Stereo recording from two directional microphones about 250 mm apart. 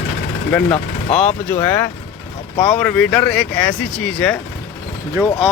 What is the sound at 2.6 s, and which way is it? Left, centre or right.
Speech, centre.